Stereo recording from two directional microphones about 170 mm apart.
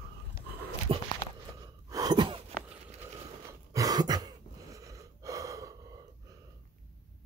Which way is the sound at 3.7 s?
20° right (ahead or behind).